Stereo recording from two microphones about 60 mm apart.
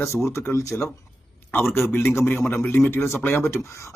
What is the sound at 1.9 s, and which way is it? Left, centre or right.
Speech, left.